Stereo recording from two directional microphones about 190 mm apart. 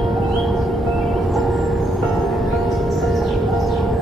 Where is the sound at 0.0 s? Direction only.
Centre (ahead or behind).